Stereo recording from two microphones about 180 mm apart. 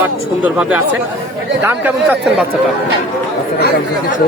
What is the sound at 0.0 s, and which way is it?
Speech, 10° right (ahead or behind).